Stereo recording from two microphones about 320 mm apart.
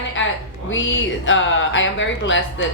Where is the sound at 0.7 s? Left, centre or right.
Left.